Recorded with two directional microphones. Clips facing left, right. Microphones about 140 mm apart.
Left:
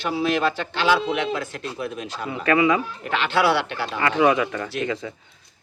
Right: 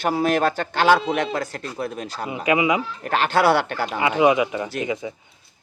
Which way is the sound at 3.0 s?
45° right (ahead or behind).